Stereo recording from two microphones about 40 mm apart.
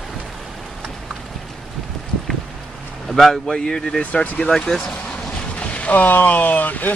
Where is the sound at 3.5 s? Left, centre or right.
Centre.